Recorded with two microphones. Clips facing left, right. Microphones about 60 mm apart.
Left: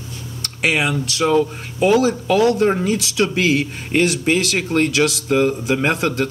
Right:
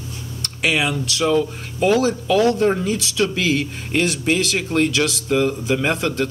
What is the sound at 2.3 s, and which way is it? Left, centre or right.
Speech, centre.